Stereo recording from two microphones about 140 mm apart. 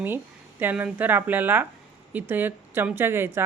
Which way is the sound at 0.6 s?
10° right (ahead or behind).